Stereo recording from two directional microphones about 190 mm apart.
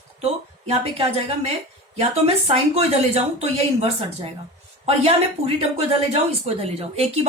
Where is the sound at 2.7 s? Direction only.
30° right (ahead or behind).